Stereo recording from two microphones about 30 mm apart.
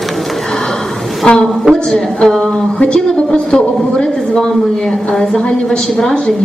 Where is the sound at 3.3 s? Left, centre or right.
Left.